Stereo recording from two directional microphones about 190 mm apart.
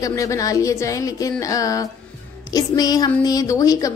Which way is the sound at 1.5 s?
15° left (ahead or behind).